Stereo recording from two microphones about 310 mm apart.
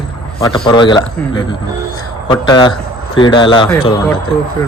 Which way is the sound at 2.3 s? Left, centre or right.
Centre.